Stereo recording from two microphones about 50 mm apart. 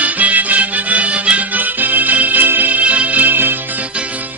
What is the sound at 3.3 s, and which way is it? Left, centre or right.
Music, right.